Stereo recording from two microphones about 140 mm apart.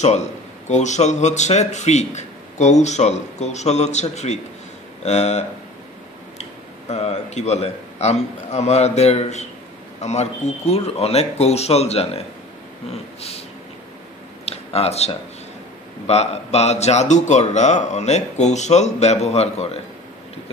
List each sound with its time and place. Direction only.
0.7 s a man's voice: 55° left (ahead or behind)
6.9 s speech: 50° left (ahead or behind)
14.4 s a sound: 45° left (ahead or behind)
16.1 s speech: 50° left (ahead or behind)